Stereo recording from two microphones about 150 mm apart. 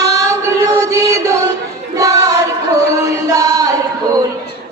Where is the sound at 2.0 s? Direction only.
25° right (ahead or behind).